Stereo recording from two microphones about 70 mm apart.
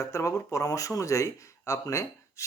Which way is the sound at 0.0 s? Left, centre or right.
Left.